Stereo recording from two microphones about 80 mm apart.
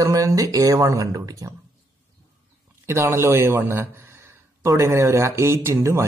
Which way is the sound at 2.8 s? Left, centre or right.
Right.